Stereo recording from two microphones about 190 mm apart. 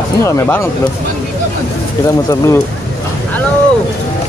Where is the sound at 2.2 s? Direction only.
15° left (ahead or behind).